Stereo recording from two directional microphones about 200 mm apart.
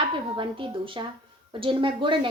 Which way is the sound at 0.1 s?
25° right (ahead or behind).